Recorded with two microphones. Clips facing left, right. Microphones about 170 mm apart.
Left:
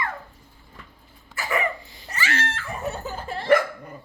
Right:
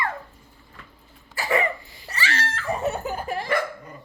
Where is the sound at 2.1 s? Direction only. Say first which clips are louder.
Left 1 dB; 35° right (ahead or behind).